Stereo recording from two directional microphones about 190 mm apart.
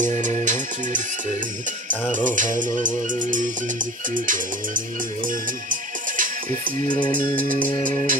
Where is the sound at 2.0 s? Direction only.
40° right (ahead or behind).